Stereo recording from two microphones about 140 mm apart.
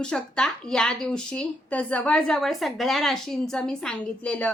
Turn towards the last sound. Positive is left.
turn(degrees=5)  # may be behind; listen again after turning